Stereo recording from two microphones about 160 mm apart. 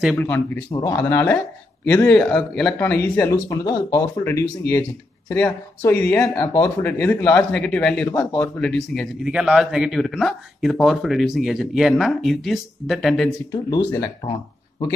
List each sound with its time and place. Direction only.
0.0 s speech: 5° left (ahead or behind)
0.7 s speech: 25° left (ahead or behind)
1.9 s speech: 5° left (ahead or behind)
3.3 s a man's voice: 20° left (ahead or behind); by 13.3 s centre (ahead or behind)
13.5 s speech: 20° left (ahead or behind)